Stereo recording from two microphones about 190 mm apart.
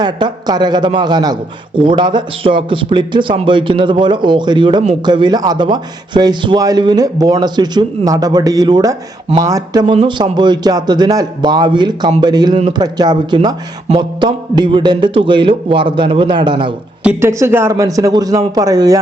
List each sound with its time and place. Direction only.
0.0 s a man's voice: 20° right (ahead or behind)
17.0 s a man's voice: 10° right (ahead or behind)